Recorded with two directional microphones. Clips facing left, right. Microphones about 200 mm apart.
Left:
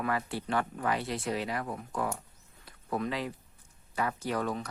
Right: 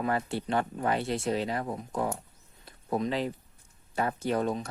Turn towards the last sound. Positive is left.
turn(degrees=-25)  # may be behind; listen again after turning